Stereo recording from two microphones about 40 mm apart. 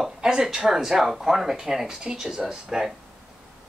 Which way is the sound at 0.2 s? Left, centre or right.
Centre.